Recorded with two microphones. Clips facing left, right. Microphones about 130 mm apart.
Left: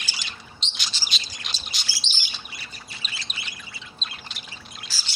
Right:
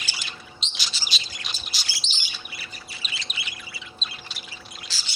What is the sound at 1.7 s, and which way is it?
Chirp, centre (ahead or behind).